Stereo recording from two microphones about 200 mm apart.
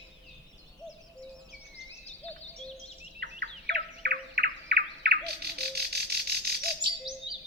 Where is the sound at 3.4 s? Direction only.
55° right (ahead or behind).